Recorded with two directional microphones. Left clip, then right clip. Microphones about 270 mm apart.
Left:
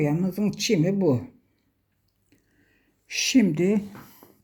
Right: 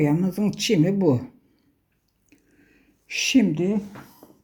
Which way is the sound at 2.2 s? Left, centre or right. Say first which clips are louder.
Right 6 dB; centre.